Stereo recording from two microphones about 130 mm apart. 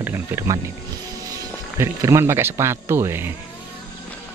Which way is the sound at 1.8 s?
25° right (ahead or behind).